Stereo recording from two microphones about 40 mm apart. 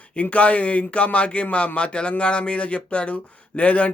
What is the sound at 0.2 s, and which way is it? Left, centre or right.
Speech, left.